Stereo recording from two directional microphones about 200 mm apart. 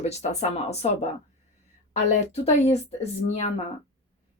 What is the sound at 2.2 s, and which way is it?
Speech, 35° left (ahead or behind).